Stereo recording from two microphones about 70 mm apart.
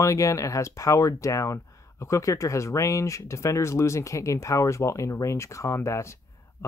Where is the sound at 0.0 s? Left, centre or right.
Left.